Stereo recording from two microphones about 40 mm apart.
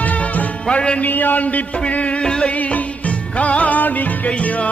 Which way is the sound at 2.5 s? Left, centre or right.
Left.